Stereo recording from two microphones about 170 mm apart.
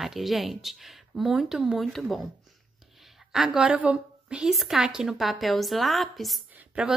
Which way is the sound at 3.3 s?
5° right (ahead or behind).